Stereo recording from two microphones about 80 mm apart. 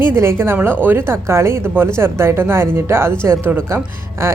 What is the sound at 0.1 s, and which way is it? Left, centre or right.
A woman's voice, right.